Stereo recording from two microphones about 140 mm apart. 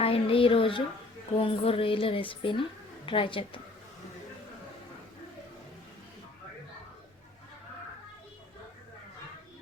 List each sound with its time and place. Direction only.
0.0 s a woman's voice: 40° left (ahead or behind)